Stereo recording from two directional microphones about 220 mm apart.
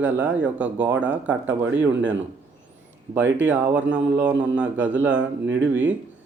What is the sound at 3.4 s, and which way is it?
Speech, 10° right (ahead or behind).